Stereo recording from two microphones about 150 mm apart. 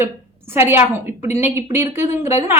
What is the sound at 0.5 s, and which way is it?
Speech, 15° right (ahead or behind).